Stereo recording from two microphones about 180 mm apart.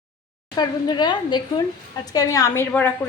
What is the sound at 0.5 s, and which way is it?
A woman's voice, 25° left (ahead or behind).